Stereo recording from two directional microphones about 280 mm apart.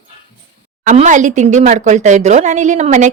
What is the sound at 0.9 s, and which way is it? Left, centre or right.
Speech, right.